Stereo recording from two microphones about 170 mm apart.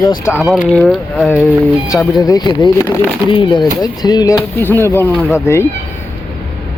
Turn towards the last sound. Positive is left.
turn(degrees=15)  # may be behind; listen again after turning